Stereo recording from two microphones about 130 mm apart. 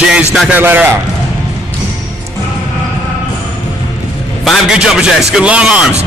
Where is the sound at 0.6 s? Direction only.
15° right (ahead or behind).